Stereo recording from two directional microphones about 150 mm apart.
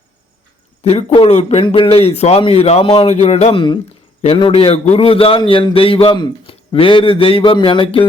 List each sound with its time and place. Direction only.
0.9 s a man's voice: 40° left (ahead or behind)